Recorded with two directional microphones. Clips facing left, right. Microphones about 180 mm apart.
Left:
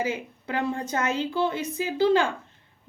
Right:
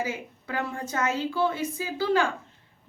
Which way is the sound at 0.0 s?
20° left (ahead or behind).